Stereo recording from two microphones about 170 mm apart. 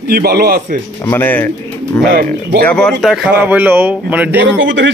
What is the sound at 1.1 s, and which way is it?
Speech, 10° left (ahead or behind).